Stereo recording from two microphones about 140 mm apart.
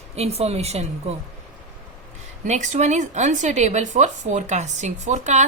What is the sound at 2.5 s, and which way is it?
Speech, 60° right (ahead or behind).